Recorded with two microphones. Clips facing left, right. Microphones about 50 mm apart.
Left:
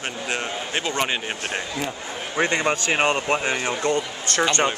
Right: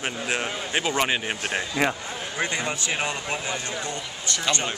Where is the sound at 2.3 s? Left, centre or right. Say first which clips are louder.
Left 7 dB; left.